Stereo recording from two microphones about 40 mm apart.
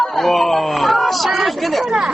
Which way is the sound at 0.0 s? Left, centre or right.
Centre.